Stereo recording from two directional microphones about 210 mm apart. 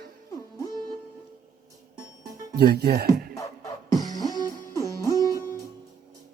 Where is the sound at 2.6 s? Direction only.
50° right (ahead or behind).